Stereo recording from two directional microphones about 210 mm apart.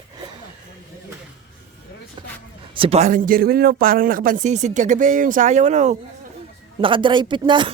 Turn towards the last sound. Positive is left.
turn(degrees=-20)  # may be behind; listen again after turning